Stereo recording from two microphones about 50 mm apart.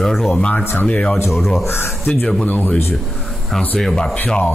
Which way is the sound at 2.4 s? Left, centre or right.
Left.